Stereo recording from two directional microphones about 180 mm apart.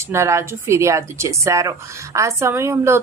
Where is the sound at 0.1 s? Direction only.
15° right (ahead or behind).